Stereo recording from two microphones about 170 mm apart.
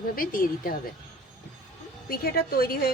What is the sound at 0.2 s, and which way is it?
Speech, 55° left (ahead or behind).